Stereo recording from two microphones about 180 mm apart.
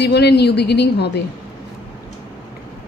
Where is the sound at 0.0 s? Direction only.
65° left (ahead or behind).